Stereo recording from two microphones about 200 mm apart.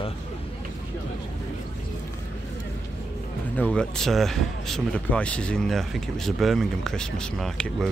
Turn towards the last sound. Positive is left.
turn(degrees=5)  # may be behind; listen again after turning